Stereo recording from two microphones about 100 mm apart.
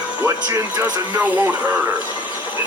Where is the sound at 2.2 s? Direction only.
50° left (ahead or behind).